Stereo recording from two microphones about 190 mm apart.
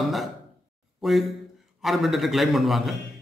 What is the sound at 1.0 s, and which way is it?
A man's voice, centre (ahead or behind).